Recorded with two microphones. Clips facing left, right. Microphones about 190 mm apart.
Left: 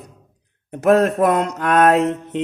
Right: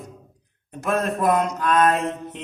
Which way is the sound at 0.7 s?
65° left (ahead or behind).